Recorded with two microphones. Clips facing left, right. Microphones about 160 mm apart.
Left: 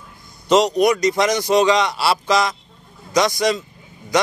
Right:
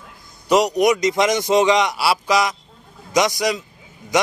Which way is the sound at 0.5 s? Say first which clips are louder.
Left 1 dB; 15° right (ahead or behind).